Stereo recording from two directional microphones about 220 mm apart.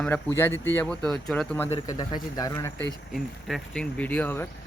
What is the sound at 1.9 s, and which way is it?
Speech, 15° left (ahead or behind).